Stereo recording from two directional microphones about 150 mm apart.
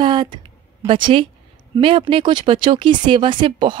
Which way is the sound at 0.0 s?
30° right (ahead or behind).